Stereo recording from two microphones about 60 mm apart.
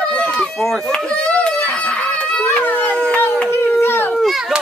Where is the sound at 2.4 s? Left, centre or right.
Left.